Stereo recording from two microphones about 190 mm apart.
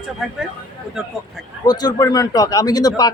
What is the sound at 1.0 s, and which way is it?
Speech, centre (ahead or behind).